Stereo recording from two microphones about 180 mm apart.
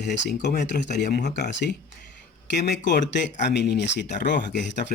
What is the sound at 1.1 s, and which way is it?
Speech, 65° left (ahead or behind).